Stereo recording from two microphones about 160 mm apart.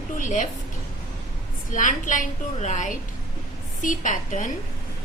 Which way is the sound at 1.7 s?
55° left (ahead or behind).